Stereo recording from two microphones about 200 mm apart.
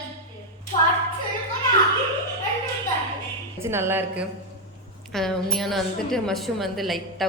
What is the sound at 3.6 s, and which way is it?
Speech, 10° right (ahead or behind).